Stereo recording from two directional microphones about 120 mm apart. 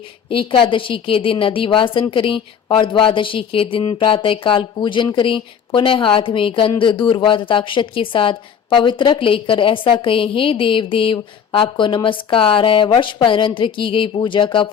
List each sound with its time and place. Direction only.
0.3 s a woman's voice: 50° left (ahead or behind)